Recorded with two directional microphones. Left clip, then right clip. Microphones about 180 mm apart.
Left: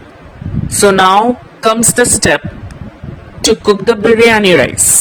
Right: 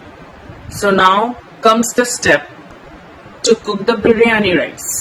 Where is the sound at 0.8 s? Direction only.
50° left (ahead or behind).